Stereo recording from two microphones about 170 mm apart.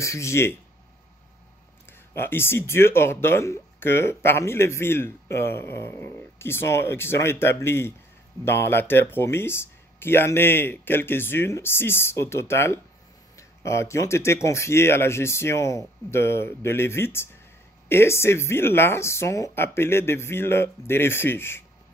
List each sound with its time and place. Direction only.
0.0 s speech: 15° left (ahead or behind)
2.1 s speech: 15° left (ahead or behind)